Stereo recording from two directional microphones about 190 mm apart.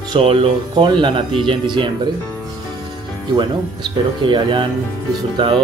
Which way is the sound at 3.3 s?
25° right (ahead or behind).